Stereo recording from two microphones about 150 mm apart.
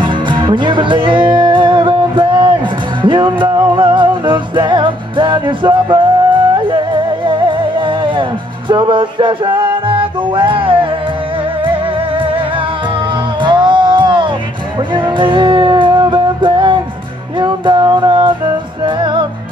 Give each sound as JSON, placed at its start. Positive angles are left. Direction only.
{"t": 0.0, "sound": "music", "side_deg": -30}
{"t": 13.4, "sound": "music", "side_deg": -30}